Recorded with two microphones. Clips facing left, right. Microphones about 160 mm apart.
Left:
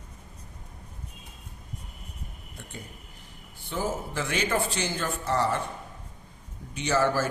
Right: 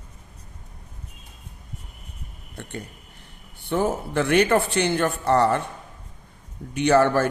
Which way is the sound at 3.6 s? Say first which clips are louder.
Right 7 dB; 65° right (ahead or behind).